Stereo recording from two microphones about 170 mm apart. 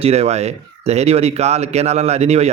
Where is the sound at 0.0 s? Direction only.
35° right (ahead or behind).